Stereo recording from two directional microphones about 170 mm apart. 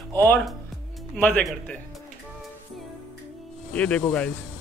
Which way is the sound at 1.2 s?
5° left (ahead or behind).